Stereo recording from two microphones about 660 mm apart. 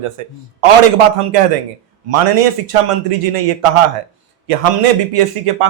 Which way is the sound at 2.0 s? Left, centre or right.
Right.